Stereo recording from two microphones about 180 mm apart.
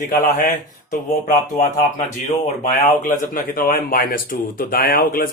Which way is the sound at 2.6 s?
50° left (ahead or behind).